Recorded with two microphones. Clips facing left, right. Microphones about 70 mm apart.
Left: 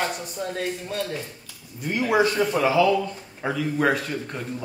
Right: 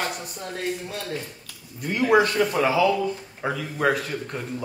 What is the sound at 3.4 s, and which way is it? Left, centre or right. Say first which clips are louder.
Speech: left 2 dB; centre.